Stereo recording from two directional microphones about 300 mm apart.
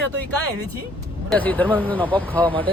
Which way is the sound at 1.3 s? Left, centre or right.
Centre.